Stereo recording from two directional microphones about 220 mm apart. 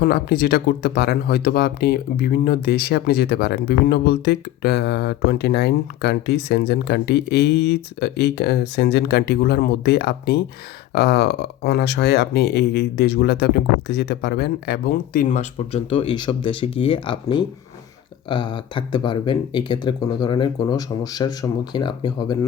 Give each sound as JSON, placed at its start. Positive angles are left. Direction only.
{"t": 0.0, "sound": "speech", "side_deg": 45}